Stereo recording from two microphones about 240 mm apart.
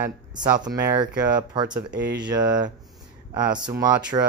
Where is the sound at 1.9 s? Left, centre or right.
Right.